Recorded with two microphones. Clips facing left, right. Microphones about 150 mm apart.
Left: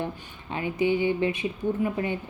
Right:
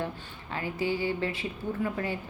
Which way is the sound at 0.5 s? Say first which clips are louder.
Left 5 dB; 20° left (ahead or behind).